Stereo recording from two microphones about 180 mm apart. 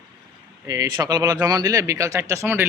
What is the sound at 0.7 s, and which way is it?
Speech, 20° right (ahead or behind).